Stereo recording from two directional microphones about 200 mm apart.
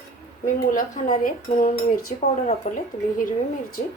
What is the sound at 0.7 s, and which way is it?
Speech, 40° left (ahead or behind).